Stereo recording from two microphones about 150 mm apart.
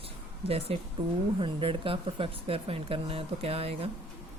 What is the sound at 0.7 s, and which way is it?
Speech, 40° right (ahead or behind).